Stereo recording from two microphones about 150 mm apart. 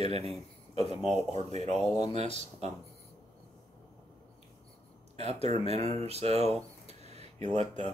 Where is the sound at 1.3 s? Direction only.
45° right (ahead or behind).